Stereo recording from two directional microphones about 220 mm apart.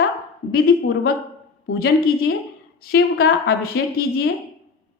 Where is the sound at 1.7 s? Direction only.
45° left (ahead or behind).